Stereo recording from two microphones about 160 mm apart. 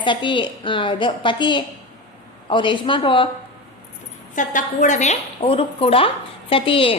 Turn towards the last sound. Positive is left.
turn(degrees=35)  # may be behind; listen again after turning